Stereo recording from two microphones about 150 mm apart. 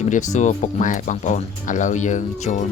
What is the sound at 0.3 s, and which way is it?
Speech, 55° left (ahead or behind).